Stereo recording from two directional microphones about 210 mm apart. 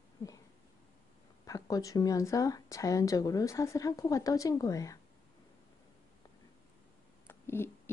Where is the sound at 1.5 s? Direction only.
15° left (ahead or behind).